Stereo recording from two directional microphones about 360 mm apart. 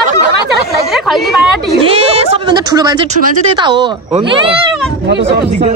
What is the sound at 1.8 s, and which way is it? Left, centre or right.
Speech, centre.